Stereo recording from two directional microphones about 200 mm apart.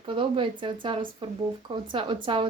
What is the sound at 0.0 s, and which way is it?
A woman's voice, 25° right (ahead or behind).